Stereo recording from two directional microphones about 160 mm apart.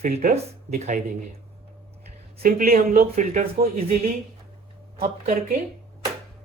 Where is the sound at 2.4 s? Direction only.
65° right (ahead or behind).